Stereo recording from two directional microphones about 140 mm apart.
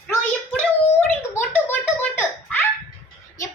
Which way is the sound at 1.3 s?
15° left (ahead or behind).